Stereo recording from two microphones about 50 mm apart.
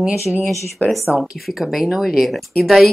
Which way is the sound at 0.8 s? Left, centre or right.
Left.